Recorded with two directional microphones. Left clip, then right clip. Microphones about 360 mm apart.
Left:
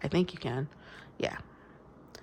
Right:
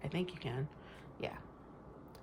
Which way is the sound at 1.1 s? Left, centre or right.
Centre.